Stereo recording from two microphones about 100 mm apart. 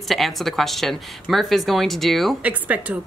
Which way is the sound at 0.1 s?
Centre (ahead or behind).